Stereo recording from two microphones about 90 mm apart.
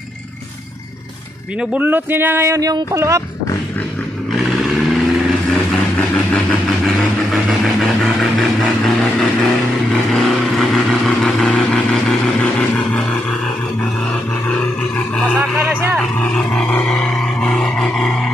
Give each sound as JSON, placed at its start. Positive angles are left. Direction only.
{"t": 1.7, "sound": "speech", "side_deg": -20}
{"t": 4.3, "sound": "vehicle", "side_deg": 0}
{"t": 15.3, "sound": "speech", "side_deg": -20}
{"t": 16.2, "sound": "speech", "side_deg": 10}
{"t": 16.9, "sound": "a sound", "side_deg": 10}